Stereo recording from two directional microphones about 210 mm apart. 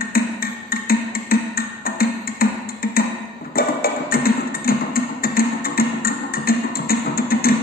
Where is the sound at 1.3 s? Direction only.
45° left (ahead or behind).